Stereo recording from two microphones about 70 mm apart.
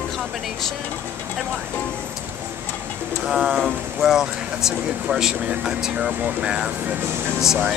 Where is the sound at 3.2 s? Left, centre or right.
Centre.